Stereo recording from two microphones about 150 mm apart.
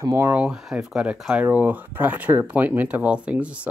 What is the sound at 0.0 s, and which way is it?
Speech, 15° right (ahead or behind).